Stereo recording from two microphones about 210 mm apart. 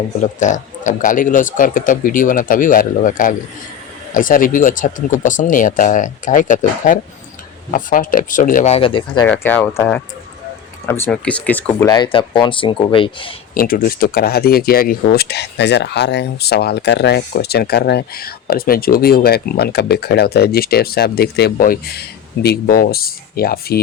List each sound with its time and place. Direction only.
0.3 s speech: 35° left (ahead or behind)
9.2 s speech: 5° left (ahead or behind); by 13.3 s 25° left (ahead or behind)
13.5 s speech: 45° left (ahead or behind)